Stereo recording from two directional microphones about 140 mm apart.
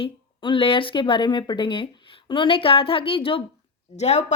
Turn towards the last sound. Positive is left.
turn(degrees=50)  # may be behind; listen again after turning